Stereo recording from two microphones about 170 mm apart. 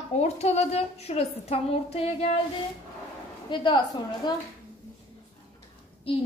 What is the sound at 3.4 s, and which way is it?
Speech, 30° left (ahead or behind).